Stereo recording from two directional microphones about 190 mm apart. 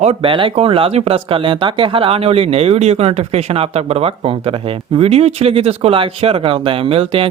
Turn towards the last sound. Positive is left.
turn(degrees=-30)  # may be behind; listen again after turning